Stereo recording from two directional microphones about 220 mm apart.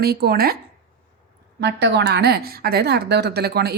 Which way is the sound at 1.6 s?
50° right (ahead or behind).